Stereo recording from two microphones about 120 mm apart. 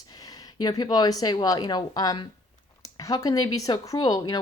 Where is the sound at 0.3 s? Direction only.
35° left (ahead or behind).